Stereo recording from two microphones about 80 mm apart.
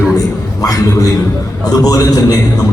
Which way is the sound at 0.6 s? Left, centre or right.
Left.